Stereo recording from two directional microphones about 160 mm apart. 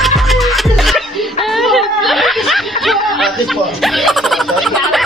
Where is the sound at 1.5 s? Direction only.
Centre (ahead or behind).